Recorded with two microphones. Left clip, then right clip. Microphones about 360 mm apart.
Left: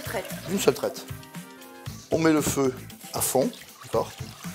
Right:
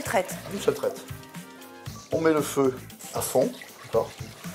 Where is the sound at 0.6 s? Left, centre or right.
Left.